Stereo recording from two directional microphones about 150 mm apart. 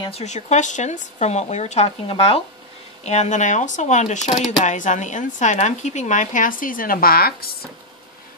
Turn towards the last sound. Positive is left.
turn(degrees=80)